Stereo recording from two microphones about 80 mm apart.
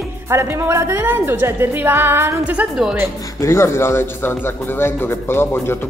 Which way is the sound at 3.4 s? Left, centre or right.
Left.